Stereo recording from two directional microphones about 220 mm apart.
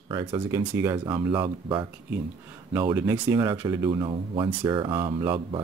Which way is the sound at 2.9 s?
10° right (ahead or behind).